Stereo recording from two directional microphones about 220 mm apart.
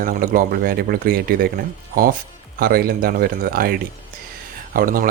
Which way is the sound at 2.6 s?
45° right (ahead or behind).